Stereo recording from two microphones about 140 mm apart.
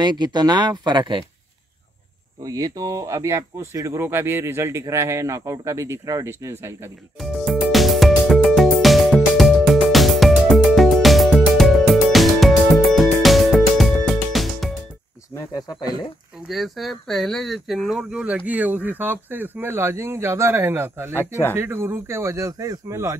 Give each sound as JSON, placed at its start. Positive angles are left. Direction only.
{"t": 0.0, "sound": "speech", "side_deg": -30}
{"t": 2.4, "sound": "speech", "side_deg": -25}
{"t": 7.2, "sound": "music", "side_deg": 0}
{"t": 15.3, "sound": "speech", "side_deg": 25}
{"t": 16.4, "sound": "speech", "side_deg": 0}
{"t": 21.1, "sound": "speech", "side_deg": 15}
{"t": 21.5, "sound": "speech", "side_deg": -15}